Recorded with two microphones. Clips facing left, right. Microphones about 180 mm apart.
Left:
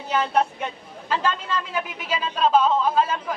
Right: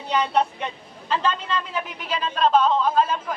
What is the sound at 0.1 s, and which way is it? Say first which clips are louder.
A woman's voice: even; 5° left (ahead or behind).